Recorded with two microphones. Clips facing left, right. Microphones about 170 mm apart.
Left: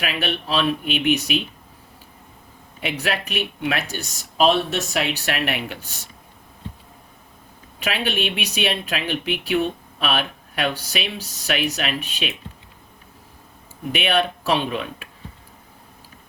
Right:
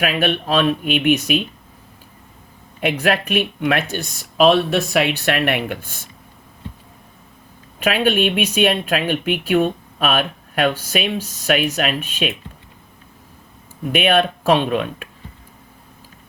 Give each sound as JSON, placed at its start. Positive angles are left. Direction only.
{"t": 0.0, "sound": "speech", "side_deg": -50}
{"t": 2.8, "sound": "speech", "side_deg": -50}
{"t": 7.8, "sound": "speech", "side_deg": -50}
{"t": 13.9, "sound": "speech", "side_deg": -50}